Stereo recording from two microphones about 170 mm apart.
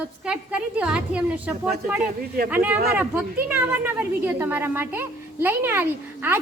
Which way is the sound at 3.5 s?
10° right (ahead or behind).